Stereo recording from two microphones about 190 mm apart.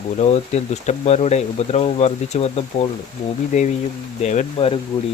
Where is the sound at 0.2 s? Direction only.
35° left (ahead or behind).